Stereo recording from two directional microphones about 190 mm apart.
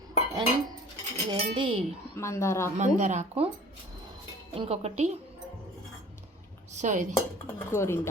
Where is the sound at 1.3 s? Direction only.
25° right (ahead or behind).